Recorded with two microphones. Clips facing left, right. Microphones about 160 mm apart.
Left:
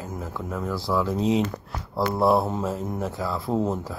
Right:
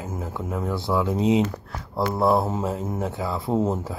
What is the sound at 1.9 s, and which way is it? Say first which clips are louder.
Speech: even; centre (ahead or behind).